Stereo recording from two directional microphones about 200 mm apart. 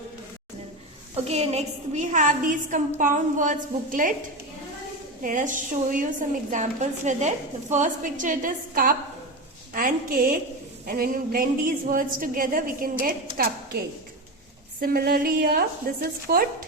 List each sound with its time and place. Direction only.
1.1 s a woman's voice: 30° right (ahead or behind)
5.2 s a woman's voice: 40° right (ahead or behind)